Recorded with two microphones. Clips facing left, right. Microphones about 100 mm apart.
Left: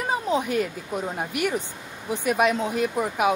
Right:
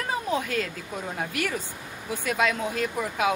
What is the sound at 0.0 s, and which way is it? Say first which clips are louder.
Speech: left 3 dB; 20° left (ahead or behind).